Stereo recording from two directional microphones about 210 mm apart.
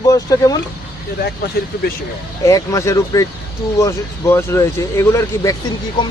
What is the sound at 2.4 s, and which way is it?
Speech, 15° left (ahead or behind).